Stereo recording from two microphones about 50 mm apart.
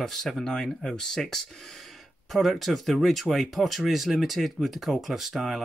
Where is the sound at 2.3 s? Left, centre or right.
Centre.